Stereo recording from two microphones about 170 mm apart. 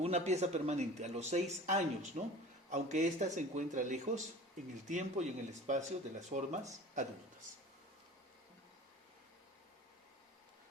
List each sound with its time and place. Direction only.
0.0 s speech: 40° right (ahead or behind)